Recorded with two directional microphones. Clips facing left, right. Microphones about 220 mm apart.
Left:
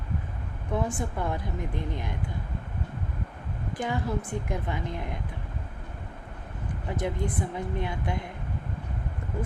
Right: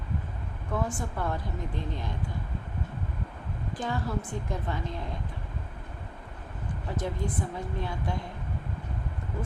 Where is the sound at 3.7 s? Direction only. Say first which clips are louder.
Left 2 dB; 15° left (ahead or behind).